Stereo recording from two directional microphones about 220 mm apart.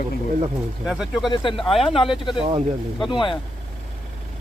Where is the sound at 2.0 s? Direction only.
20° left (ahead or behind).